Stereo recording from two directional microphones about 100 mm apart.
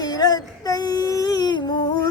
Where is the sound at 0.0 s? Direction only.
40° left (ahead or behind).